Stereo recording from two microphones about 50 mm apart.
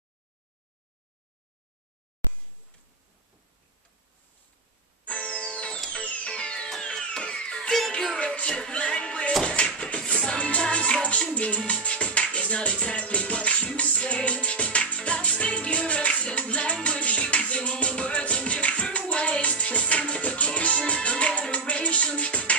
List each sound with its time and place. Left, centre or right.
5.0 s music: left
8.2 s a sound: left
9.4 s music: centre